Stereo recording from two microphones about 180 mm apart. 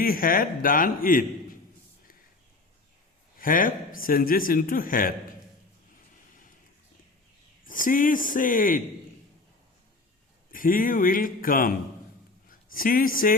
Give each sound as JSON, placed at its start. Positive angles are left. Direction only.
{"t": 0.0, "sound": "a man's voice", "side_deg": 50}
{"t": 3.3, "sound": "a man's voice", "side_deg": 50}
{"t": 7.6, "sound": "a man's voice", "side_deg": 50}
{"t": 10.5, "sound": "a man's voice", "side_deg": 50}